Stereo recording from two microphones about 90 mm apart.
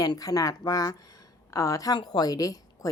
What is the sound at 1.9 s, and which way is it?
Speech, 50° left (ahead or behind).